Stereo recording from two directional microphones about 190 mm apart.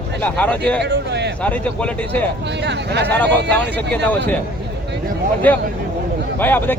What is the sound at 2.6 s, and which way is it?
Speech, 60° right (ahead or behind).